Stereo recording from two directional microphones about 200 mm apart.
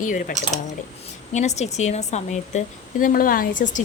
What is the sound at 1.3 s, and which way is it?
A woman's voice, 35° left (ahead or behind).